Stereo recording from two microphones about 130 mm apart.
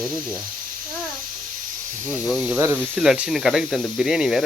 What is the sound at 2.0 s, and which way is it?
Speech, 20° left (ahead or behind).